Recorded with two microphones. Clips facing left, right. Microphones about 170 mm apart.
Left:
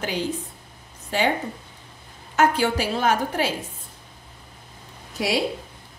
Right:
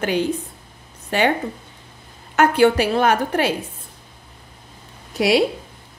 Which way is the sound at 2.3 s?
60° right (ahead or behind).